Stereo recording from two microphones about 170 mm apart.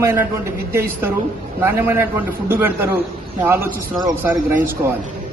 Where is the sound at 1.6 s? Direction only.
15° right (ahead or behind).